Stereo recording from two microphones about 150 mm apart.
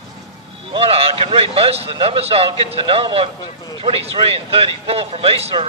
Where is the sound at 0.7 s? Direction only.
40° right (ahead or behind).